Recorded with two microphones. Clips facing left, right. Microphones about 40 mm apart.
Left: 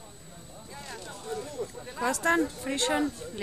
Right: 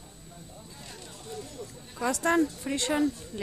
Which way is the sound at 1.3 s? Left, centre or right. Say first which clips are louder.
Left 6 dB; centre.